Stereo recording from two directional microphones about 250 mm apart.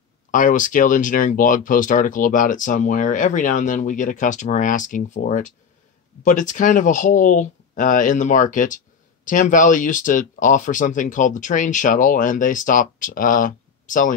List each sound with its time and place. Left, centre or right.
0.3 s speech: left